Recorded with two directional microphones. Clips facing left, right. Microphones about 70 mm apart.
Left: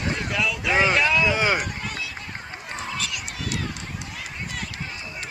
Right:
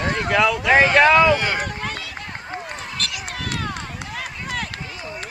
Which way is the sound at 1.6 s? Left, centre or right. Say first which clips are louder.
Right 3 dB; right.